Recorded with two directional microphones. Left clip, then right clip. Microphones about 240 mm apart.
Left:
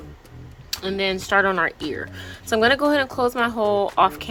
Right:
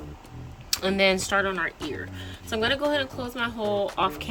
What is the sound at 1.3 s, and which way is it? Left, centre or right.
Speech, centre.